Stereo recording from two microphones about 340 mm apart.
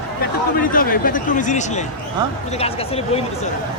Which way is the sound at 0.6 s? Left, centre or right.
Left.